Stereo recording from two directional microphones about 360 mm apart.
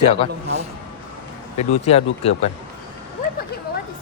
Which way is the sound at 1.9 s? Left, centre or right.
Centre.